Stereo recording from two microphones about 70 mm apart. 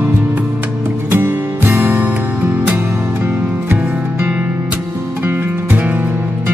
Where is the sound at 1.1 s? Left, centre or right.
Right.